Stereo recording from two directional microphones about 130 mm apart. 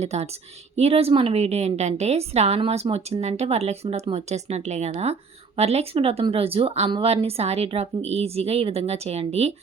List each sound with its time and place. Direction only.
0.0 s a woman's voice: 60° right (ahead or behind)